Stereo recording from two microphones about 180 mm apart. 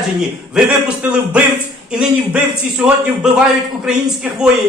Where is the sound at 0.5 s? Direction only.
5° right (ahead or behind).